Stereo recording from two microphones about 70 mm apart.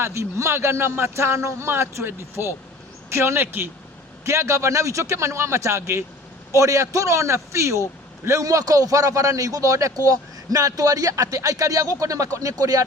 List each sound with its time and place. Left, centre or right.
0.0 s a man's voice: right